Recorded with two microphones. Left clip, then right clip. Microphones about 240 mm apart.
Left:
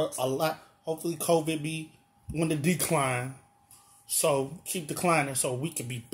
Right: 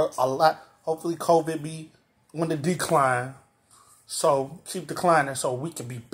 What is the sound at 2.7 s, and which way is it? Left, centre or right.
Speech, centre.